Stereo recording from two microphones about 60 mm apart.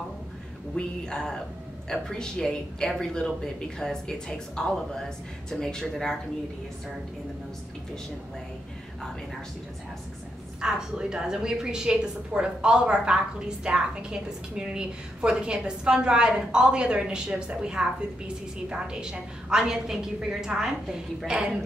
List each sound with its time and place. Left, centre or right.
0.7 s a woman's voice: centre
10.6 s a woman's voice: centre